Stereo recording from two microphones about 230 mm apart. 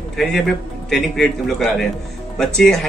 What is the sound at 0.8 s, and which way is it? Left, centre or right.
A man's voice, centre.